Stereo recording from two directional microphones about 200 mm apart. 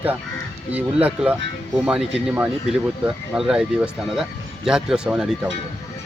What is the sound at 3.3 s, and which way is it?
Speech, 5° right (ahead or behind).